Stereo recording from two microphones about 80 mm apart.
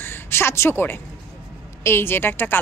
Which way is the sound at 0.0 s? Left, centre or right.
Left.